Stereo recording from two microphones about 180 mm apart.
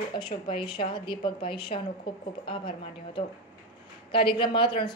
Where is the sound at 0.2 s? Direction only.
25° left (ahead or behind).